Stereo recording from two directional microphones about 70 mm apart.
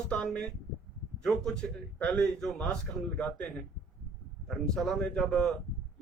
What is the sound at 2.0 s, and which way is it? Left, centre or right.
Speech, left.